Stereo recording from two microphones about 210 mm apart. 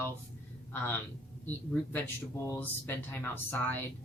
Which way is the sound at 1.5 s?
10° left (ahead or behind).